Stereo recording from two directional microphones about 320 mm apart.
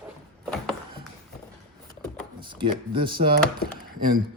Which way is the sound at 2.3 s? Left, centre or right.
Centre.